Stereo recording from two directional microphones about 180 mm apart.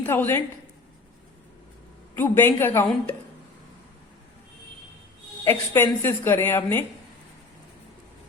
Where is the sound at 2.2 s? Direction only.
10° left (ahead or behind).